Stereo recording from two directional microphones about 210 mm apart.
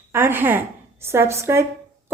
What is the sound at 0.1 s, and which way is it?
A woman's voice, 10° right (ahead or behind).